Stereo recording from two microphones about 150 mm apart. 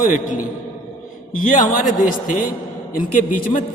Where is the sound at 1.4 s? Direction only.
60° left (ahead or behind).